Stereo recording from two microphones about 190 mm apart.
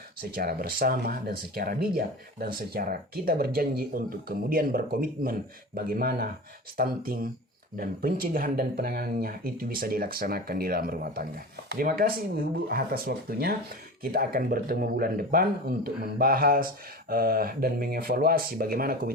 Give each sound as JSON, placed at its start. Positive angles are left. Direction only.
{"t": 0.3, "sound": "speech", "side_deg": -55}